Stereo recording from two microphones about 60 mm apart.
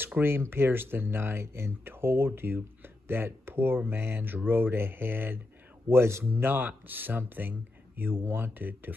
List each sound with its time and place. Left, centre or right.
0.2 s speech: right
0.5 s a man's voice: right
6.2 s speech: right